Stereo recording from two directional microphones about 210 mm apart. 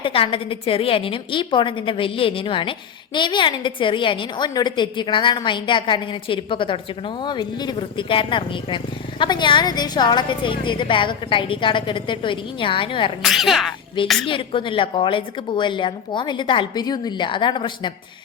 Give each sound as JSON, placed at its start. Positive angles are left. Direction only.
{"t": 0.0, "sound": "speech", "side_deg": 25}
{"t": 13.2, "sound": "speech", "side_deg": 0}
{"t": 14.3, "sound": "speech", "side_deg": 25}